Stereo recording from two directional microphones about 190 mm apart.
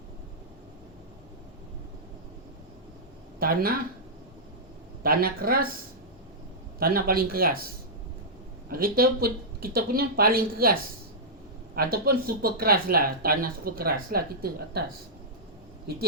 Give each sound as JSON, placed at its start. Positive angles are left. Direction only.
{"t": 3.4, "sound": "speech", "side_deg": -50}
{"t": 5.0, "sound": "speech", "side_deg": -50}
{"t": 6.7, "sound": "speech", "side_deg": -50}
{"t": 8.7, "sound": "speech", "side_deg": -50}